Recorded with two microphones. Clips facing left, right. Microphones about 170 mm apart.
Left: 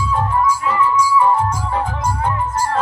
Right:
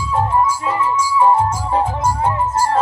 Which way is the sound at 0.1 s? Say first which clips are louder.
Right 2 dB; 25° right (ahead or behind).